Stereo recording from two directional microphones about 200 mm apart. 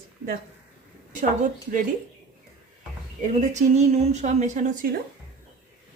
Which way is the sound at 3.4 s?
35° right (ahead or behind).